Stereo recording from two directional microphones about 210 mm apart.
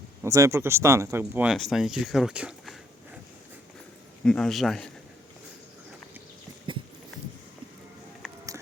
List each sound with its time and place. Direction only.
0.2 s speech: 15° right (ahead or behind)
4.2 s speech: 5° left (ahead or behind)
6.7 s a sound: 25° right (ahead or behind)